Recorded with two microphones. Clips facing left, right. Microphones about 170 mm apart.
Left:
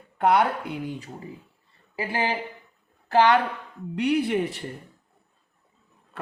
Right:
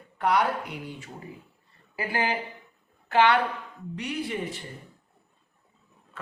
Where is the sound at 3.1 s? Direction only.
40° left (ahead or behind).